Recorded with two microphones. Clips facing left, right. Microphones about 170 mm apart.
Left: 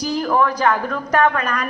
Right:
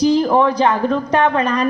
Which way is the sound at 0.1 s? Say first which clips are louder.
Right 5 dB; 25° right (ahead or behind).